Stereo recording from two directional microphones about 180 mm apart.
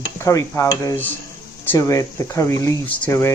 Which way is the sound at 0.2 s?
15° left (ahead or behind).